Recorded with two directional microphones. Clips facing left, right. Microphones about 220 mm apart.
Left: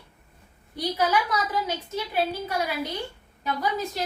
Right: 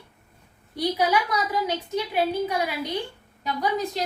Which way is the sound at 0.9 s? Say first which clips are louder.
Left 1 dB; 15° right (ahead or behind).